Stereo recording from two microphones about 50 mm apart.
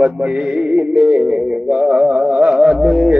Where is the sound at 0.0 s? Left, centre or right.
Right.